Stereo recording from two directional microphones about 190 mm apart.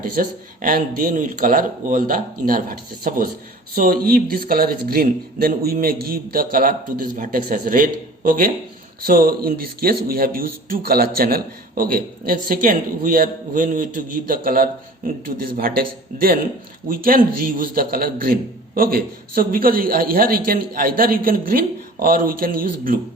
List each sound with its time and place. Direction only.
0.0 s speech: 50° right (ahead or behind)
16.9 s speech: 45° right (ahead or behind)